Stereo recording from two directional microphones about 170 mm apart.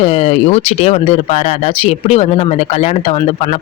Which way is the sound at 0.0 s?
40° left (ahead or behind).